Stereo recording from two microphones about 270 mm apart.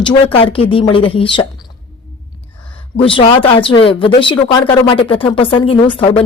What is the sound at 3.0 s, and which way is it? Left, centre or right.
Speech, centre.